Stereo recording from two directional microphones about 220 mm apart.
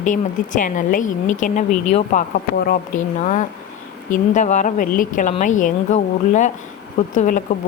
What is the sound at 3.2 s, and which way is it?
Speech, 35° left (ahead or behind).